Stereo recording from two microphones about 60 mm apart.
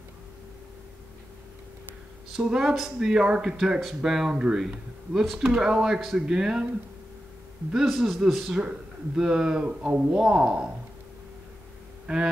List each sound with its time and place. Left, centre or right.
2.3 s speech: centre
5.2 s a man's voice: centre
5.5 s speech: centre
7.7 s a man's voice: centre
9.7 s speech: right